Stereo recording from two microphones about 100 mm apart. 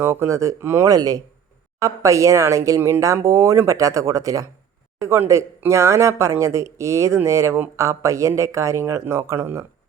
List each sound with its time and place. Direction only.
0.0 s speech: 25° right (ahead or behind)